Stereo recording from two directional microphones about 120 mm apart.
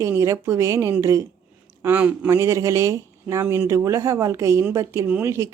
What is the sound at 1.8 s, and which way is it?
Speech, 15° right (ahead or behind).